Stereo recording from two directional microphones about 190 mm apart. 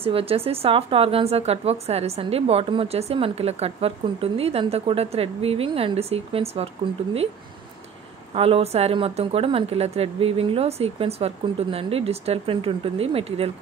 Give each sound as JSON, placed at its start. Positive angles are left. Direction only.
{"t": 0.0, "sound": "a woman's voice", "side_deg": -30}
{"t": 8.4, "sound": "a woman's voice", "side_deg": -30}